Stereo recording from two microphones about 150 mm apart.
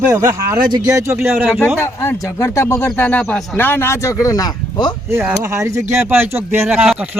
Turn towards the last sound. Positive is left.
turn(degrees=-5)  # may be behind; listen again after turning